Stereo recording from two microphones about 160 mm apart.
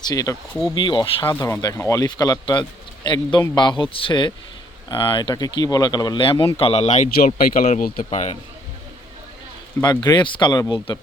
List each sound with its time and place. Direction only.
0.0 s a man's voice: 25° left (ahead or behind)
1.2 s a man's voice: 15° left (ahead or behind); by 8.0 s 60° left (ahead or behind)
8.1 s speech: 45° left (ahead or behind)
9.8 s a man's voice: 25° left (ahead or behind)